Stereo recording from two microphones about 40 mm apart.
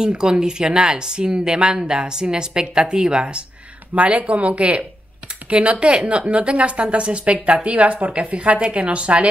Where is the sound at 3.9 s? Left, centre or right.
Right.